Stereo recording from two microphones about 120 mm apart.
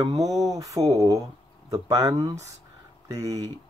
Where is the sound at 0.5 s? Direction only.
25° right (ahead or behind).